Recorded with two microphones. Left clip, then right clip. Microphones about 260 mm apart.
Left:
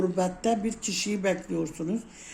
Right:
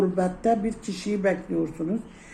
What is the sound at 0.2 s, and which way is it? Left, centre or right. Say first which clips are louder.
A man's voice: right 3 dB; left.